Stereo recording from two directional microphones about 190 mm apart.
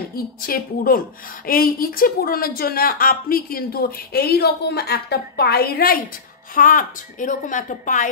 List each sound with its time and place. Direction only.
0.1 s a woman's voice: 50° left (ahead or behind)